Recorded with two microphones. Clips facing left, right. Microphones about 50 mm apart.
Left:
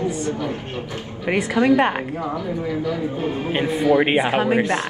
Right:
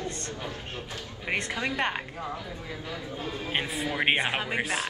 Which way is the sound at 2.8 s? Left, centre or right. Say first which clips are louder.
Left 12 dB; left.